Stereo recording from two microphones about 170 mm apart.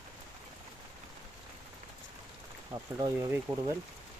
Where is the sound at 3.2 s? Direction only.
15° right (ahead or behind).